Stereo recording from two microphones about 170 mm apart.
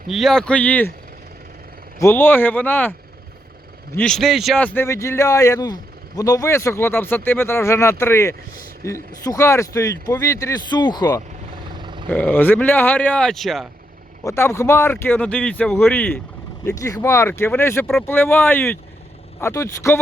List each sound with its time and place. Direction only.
0.1 s a man's voice: centre (ahead or behind)
2.0 s a man's voice: 15° left (ahead or behind)
3.9 s a man's voice: 5° left (ahead or behind); by 11.1 s 25° left (ahead or behind)
11.7 s vehicle: 25° right (ahead or behind)
12.0 s a man's voice: 10° left (ahead or behind)
14.3 s a man's voice: 15° left (ahead or behind)